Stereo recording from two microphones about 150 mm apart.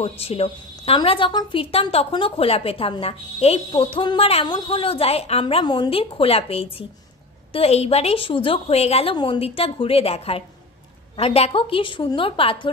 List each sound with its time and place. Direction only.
0.0 s a woman's voice: 40° left (ahead or behind)